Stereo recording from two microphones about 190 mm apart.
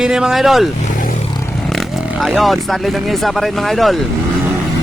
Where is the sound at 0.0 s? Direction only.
5° right (ahead or behind).